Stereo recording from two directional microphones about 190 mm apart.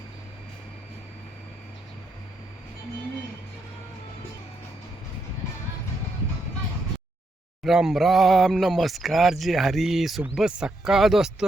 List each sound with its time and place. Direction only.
7.6 s speech: centre (ahead or behind)